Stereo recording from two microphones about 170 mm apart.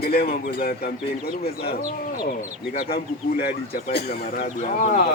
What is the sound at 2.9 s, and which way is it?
Speech, 65° left (ahead or behind).